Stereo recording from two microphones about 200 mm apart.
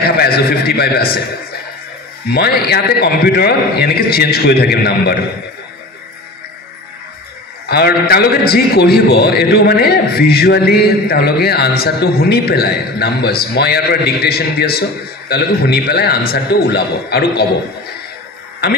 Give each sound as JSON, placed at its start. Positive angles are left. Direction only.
{"t": 0.2, "sound": "a man's voice", "side_deg": 50}
{"t": 2.3, "sound": "a man's voice", "side_deg": 50}
{"t": 7.6, "sound": "a man's voice", "side_deg": 50}